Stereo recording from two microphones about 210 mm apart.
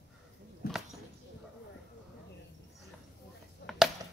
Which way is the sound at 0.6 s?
50° left (ahead or behind).